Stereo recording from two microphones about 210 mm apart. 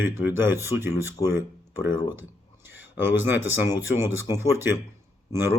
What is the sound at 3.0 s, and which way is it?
Speech, 10° right (ahead or behind).